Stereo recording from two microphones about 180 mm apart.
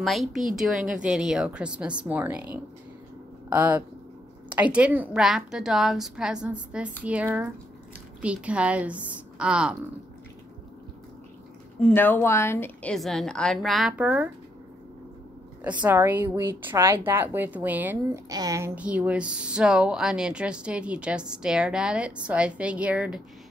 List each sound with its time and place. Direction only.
0.0 s speech: centre (ahead or behind)
11.8 s speech: 10° left (ahead or behind); by 14.3 s 10° right (ahead or behind)
15.8 s a woman's voice: 10° right (ahead or behind)
18.8 s speech: 5° right (ahead or behind)